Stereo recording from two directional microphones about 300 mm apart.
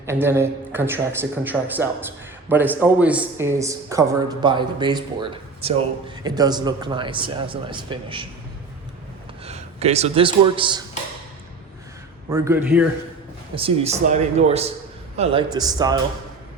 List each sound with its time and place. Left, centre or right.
0.0 s speech: centre
9.4 s a man's voice: right
12.3 s a man's voice: centre
13.6 s speech: centre